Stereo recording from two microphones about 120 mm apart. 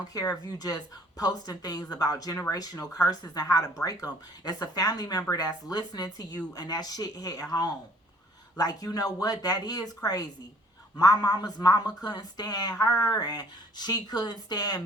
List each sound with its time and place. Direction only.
0.1 s speech: 35° left (ahead or behind)